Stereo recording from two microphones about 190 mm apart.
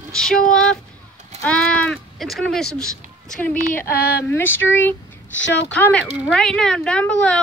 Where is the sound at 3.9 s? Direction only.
55° left (ahead or behind).